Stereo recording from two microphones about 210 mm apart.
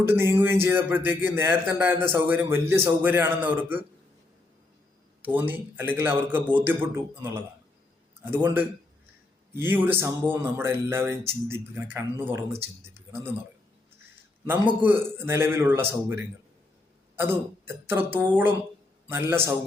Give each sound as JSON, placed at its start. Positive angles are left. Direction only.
{"t": 0.0, "sound": "speech", "side_deg": -10}
{"t": 5.2, "sound": "speech", "side_deg": -10}
{"t": 14.7, "sound": "speech", "side_deg": -10}
{"t": 17.8, "sound": "speech", "side_deg": -10}